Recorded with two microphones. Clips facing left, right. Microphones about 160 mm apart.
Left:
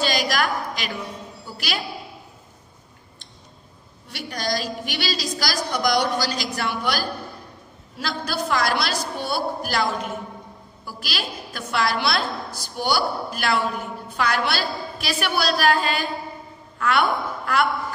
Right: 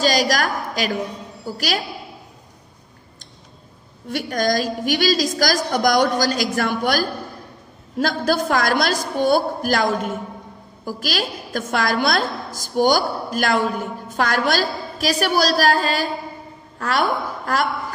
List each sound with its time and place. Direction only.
0.0 s a sound: 40° right (ahead or behind)
1.4 s a woman's voice: 45° right (ahead or behind)
4.1 s a woman's voice: 50° right (ahead or behind)